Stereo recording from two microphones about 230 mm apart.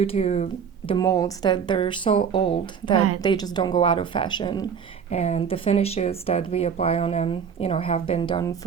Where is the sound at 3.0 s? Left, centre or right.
Right.